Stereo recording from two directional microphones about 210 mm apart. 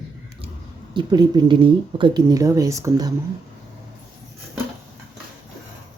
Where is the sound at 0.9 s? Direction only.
20° right (ahead or behind).